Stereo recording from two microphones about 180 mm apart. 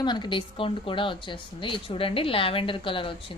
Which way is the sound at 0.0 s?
25° left (ahead or behind).